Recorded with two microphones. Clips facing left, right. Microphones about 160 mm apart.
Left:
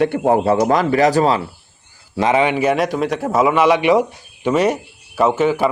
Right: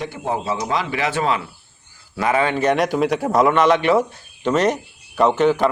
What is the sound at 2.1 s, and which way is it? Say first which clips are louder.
A man's voice: left 3 dB; 20° left (ahead or behind).